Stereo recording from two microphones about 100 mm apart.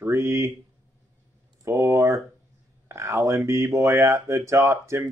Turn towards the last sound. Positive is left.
turn(degrees=-30)  # may be behind; listen again after turning